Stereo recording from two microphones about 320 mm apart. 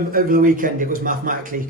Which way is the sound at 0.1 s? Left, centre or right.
Right.